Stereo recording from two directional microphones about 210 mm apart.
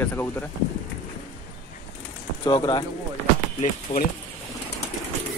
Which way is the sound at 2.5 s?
20° left (ahead or behind).